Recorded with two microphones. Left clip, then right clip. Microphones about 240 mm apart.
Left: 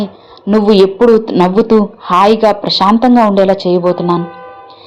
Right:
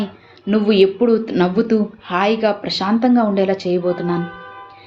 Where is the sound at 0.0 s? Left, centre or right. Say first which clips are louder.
Left 6 dB; centre.